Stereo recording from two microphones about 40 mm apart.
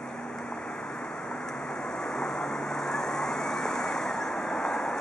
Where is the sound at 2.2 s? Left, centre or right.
Centre.